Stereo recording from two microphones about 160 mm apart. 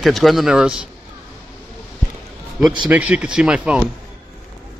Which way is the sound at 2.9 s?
10° right (ahead or behind).